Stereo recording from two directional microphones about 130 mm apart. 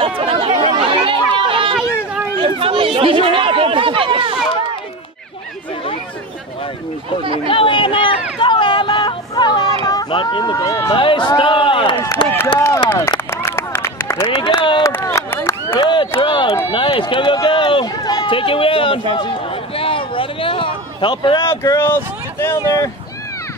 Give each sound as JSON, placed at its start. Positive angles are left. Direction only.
{"t": 0.0, "sound": "chatter", "side_deg": -45}
{"t": 7.4, "sound": "speech", "side_deg": 40}
{"t": 9.3, "sound": "a sound", "side_deg": 35}
{"t": 9.8, "sound": "speech", "side_deg": 30}
{"t": 11.0, "sound": "speech", "side_deg": 40}
{"t": 12.5, "sound": "speech", "side_deg": 20}
{"t": 13.3, "sound": "run", "side_deg": 20}
{"t": 14.2, "sound": "speech", "side_deg": 40}
{"t": 14.8, "sound": "run", "side_deg": 20}
{"t": 15.7, "sound": "a sound", "side_deg": 40}
{"t": 16.7, "sound": "speech", "side_deg": 40}
{"t": 19.1, "sound": "a sound", "side_deg": 45}
{"t": 21.5, "sound": "speech", "side_deg": 20}